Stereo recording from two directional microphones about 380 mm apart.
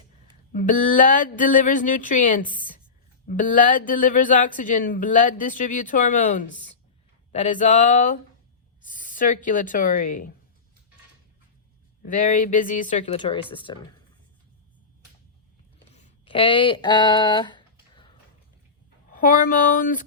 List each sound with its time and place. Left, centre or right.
0.5 s speech: left
7.5 s speech: centre
12.0 s speech: left
15.9 s a sound: centre
19.1 s speech: left